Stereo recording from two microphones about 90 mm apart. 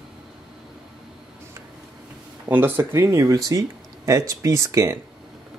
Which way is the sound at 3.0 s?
40° right (ahead or behind).